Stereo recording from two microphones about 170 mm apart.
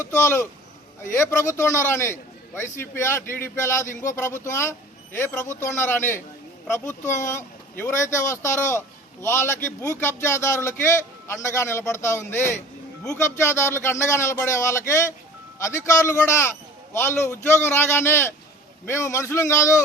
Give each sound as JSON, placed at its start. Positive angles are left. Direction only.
{"t": 0.0, "sound": "a man's voice", "side_deg": 15}